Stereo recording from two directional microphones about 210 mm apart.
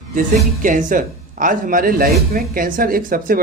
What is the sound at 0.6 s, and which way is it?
Speech, 40° right (ahead or behind).